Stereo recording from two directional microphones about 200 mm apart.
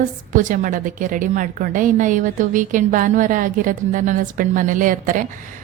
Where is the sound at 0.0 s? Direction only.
40° right (ahead or behind).